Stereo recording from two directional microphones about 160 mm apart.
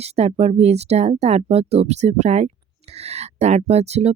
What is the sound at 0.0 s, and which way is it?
Speech, 40° right (ahead or behind).